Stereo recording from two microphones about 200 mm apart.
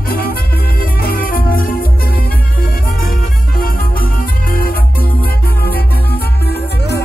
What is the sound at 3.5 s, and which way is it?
Music, 45° left (ahead or behind).